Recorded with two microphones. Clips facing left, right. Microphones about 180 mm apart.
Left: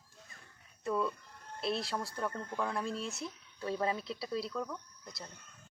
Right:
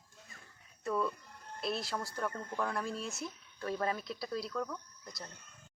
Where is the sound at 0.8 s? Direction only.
Centre (ahead or behind).